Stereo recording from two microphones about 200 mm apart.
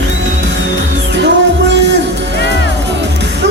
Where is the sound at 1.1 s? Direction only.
60° right (ahead or behind).